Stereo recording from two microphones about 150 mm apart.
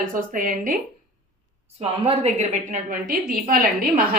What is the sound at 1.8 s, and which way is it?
A woman's voice, 45° right (ahead or behind).